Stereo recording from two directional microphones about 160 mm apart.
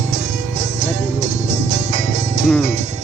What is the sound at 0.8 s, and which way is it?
Music, 45° right (ahead or behind).